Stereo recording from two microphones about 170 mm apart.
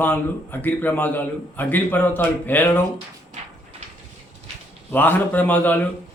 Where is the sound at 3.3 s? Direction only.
45° right (ahead or behind).